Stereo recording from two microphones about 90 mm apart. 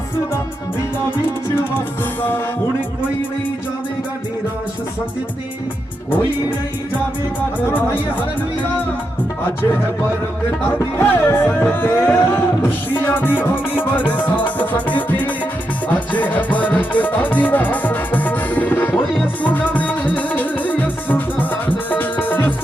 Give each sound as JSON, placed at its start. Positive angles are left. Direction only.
{"t": 7.7, "sound": "music", "side_deg": 20}
{"t": 10.7, "sound": "music", "side_deg": 25}